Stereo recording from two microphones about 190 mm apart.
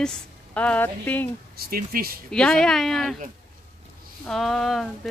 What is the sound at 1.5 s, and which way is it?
Speech, 50° right (ahead or behind).